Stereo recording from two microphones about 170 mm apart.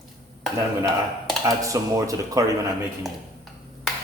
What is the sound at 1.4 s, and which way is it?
A man's voice, 20° right (ahead or behind).